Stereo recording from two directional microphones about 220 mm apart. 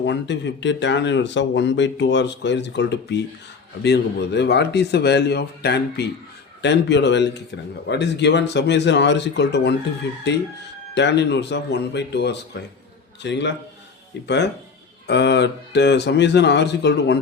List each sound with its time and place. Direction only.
0.0 s speech: 50° left (ahead or behind)